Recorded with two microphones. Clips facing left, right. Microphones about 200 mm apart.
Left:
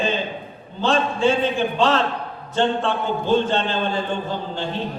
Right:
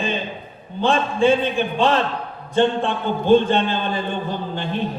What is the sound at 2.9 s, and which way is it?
A man's voice, 55° right (ahead or behind).